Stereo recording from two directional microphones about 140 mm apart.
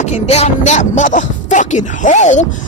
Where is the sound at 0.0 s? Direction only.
50° left (ahead or behind).